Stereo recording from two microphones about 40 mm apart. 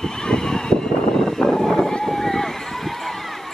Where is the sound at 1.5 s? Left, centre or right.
Centre.